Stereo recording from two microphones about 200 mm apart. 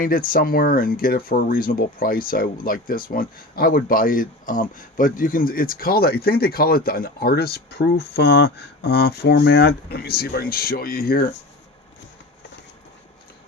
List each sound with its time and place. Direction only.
0.0 s speech: 45° left (ahead or behind)